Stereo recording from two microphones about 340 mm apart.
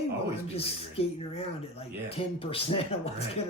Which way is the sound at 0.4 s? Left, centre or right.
Centre.